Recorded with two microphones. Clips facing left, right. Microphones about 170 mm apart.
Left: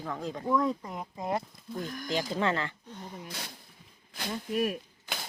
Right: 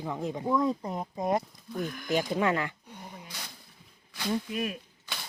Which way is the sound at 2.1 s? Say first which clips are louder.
Right 3 dB; 20° right (ahead or behind).